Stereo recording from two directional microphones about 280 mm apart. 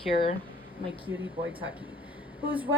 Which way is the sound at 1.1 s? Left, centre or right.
Centre.